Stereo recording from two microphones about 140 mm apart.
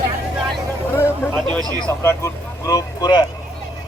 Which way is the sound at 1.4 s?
5° left (ahead or behind).